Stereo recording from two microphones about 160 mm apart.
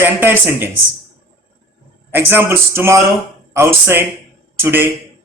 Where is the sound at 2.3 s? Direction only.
15° right (ahead or behind).